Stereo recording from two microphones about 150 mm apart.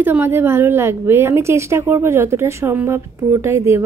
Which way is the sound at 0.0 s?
15° right (ahead or behind).